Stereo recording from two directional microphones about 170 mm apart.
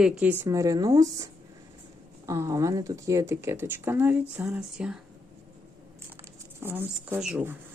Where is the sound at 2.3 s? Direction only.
20° right (ahead or behind).